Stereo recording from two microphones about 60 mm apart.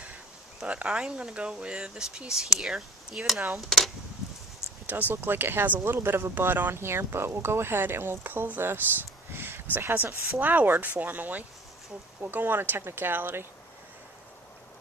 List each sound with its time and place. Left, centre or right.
0.6 s speech: centre
4.9 s speech: right
6.7 s speech: right